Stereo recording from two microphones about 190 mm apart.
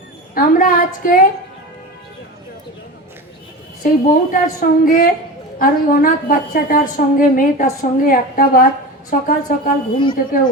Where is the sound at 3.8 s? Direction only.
50° left (ahead or behind).